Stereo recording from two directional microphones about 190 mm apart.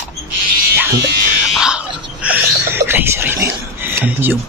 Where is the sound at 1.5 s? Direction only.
5° right (ahead or behind).